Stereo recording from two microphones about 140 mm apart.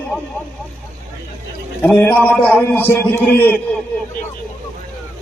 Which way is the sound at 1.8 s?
15° left (ahead or behind).